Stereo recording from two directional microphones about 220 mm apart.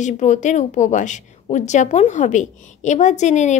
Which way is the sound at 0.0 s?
35° left (ahead or behind).